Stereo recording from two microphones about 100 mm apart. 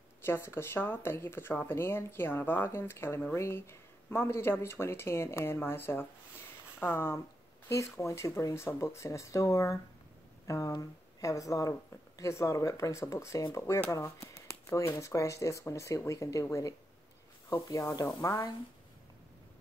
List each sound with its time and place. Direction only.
0.2 s speech: 25° left (ahead or behind)